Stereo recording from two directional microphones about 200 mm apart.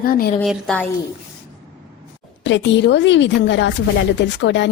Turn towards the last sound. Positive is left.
turn(degrees=65)  # may be behind; listen again after turning